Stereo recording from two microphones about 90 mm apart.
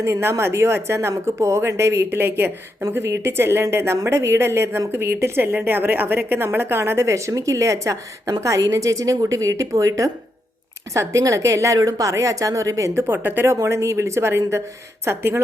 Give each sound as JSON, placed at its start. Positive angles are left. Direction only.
{"t": 0.0, "sound": "a woman's voice", "side_deg": -30}
{"t": 13.1, "sound": "a woman's voice", "side_deg": -20}